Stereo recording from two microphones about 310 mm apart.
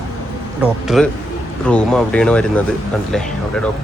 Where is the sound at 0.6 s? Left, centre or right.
Centre.